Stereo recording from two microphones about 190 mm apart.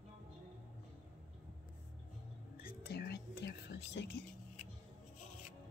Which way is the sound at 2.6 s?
55° left (ahead or behind).